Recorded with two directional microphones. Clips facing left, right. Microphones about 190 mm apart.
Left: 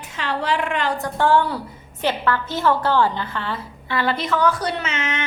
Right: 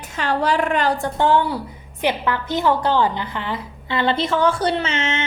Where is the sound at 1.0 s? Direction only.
20° right (ahead or behind).